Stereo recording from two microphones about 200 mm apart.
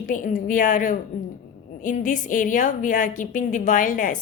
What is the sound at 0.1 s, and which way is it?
A woman's voice, 40° left (ahead or behind).